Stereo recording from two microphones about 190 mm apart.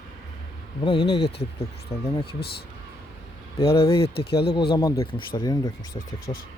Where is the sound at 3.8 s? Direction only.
30° left (ahead or behind).